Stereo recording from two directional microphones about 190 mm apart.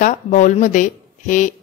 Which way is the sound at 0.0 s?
40° left (ahead or behind).